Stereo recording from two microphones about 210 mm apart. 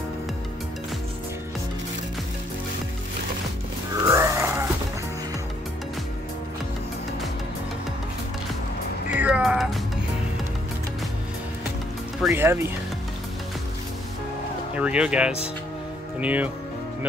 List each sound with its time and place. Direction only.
3.9 s grunt: 15° right (ahead or behind)
9.2 s music: 5° right (ahead or behind)
12.3 s speech: 10° right (ahead or behind)
14.8 s speech: 5° right (ahead or behind)